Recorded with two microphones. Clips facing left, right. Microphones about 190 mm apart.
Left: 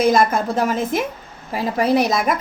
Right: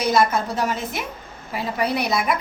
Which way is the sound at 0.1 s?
50° left (ahead or behind).